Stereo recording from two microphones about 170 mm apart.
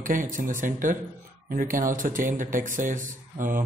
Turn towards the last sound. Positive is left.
turn(degrees=-50)  # may be behind; listen again after turning